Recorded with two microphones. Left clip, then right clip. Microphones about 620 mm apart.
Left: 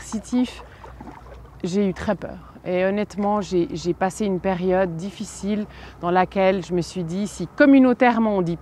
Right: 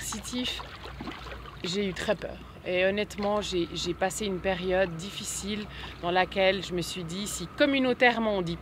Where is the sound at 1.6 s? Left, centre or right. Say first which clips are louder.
Left 6 dB; left.